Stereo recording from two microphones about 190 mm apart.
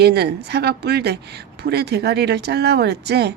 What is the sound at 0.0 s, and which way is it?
A woman's voice, 60° right (ahead or behind).